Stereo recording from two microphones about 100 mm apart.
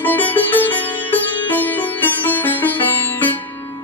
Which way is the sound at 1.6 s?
15° left (ahead or behind).